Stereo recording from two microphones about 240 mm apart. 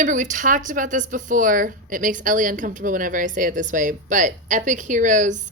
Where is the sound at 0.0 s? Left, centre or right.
Right.